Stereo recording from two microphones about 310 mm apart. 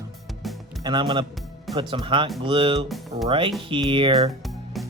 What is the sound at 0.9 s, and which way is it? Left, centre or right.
Speech, centre.